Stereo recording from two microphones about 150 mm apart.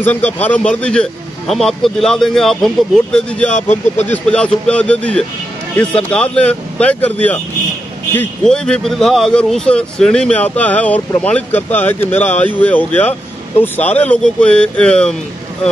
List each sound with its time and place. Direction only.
0.0 s a man's voice: 10° left (ahead or behind)